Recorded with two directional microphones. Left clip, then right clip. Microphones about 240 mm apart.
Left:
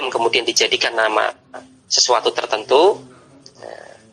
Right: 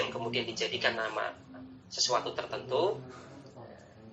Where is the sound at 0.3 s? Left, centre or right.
Left.